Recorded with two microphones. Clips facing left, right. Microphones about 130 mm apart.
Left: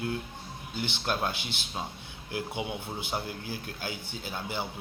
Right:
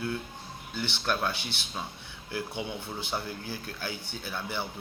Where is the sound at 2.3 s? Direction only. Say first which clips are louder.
Left 1 dB; 20° left (ahead or behind).